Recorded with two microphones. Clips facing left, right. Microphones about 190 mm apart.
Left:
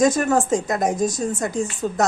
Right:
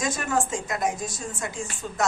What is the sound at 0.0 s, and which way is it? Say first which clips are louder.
A woman's voice: left 9 dB; 40° left (ahead or behind).